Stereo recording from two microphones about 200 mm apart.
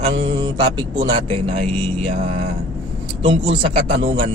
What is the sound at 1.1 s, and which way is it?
Speech, 30° right (ahead or behind).